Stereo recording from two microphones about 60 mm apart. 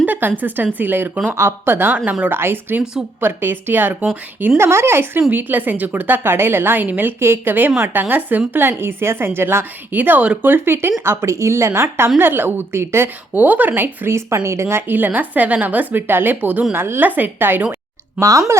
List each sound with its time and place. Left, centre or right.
0.0 s speech: right
4.5 s speech: right
5.3 s speech: right
13.3 s speech: right
14.1 s speech: right
16.7 s speech: right
18.2 s speech: right